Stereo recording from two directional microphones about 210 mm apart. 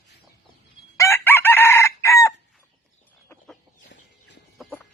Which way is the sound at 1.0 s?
15° left (ahead or behind).